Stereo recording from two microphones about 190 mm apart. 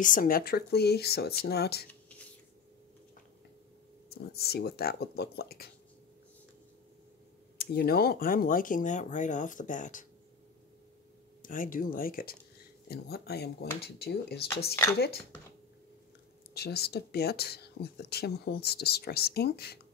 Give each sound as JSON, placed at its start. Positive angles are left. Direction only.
{"t": 0.0, "sound": "speech", "side_deg": 45}
{"t": 4.1, "sound": "speech", "side_deg": 55}
{"t": 7.5, "sound": "speech", "side_deg": 55}
{"t": 11.4, "sound": "speech", "side_deg": 45}
{"t": 16.5, "sound": "speech", "side_deg": 55}